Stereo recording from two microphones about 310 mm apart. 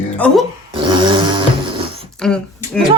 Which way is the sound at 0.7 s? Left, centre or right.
Centre.